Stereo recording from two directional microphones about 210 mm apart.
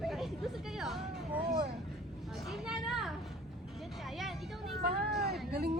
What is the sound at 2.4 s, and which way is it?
Speech, centre (ahead or behind).